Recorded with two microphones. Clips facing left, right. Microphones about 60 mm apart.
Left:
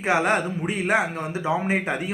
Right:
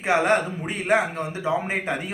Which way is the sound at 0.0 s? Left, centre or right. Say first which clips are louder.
Right 1 dB; centre.